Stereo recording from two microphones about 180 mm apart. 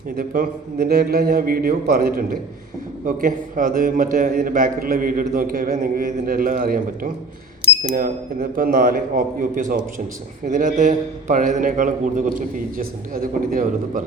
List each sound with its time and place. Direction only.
0.2 s a man's voice: 55° right (ahead or behind)
13.5 s a man's voice: 50° right (ahead or behind)